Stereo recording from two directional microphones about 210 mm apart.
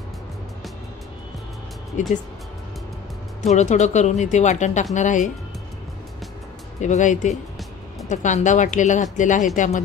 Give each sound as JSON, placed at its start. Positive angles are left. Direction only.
{"t": 2.0, "sound": "speech", "side_deg": 35}
{"t": 3.4, "sound": "speech", "side_deg": 35}
{"t": 6.8, "sound": "speech", "side_deg": 35}